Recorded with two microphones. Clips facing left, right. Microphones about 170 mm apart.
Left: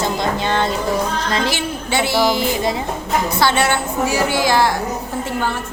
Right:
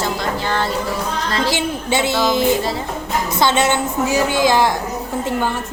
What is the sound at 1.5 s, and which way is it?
Speech, 20° right (ahead or behind).